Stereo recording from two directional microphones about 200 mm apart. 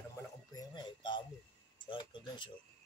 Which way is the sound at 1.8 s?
25° left (ahead or behind).